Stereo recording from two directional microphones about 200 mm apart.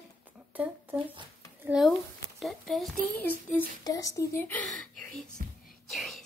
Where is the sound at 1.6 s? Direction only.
5° right (ahead or behind).